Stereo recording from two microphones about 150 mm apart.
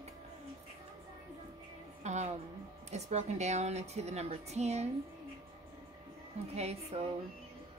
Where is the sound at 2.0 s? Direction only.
50° right (ahead or behind).